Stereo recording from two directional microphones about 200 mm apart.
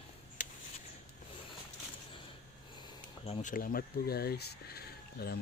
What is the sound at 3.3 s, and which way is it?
Speech, 40° left (ahead or behind).